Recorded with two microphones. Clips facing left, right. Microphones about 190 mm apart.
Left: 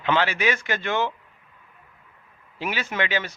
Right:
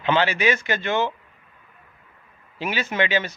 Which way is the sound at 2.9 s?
20° right (ahead or behind).